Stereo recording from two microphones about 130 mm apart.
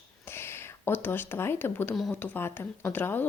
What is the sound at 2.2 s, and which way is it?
Speech, 15° left (ahead or behind).